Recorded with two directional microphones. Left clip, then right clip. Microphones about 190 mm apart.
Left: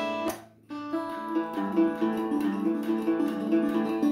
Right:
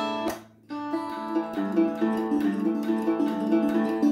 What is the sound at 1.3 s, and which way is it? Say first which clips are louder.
Music: right 1 dB; 20° right (ahead or behind).